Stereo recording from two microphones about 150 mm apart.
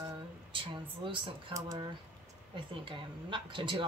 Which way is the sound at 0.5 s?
35° right (ahead or behind).